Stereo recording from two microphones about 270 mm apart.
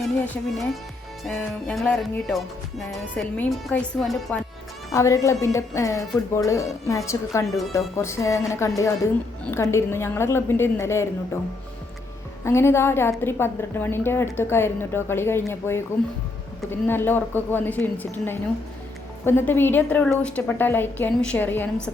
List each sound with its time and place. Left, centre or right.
0.0 s music: centre
4.9 s a woman's voice: centre
12.5 s a woman's voice: centre
16.8 s a woman's voice: centre